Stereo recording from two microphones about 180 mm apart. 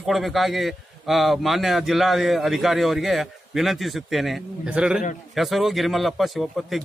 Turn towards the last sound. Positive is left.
turn(degrees=0)  # may be behind; listen again after turning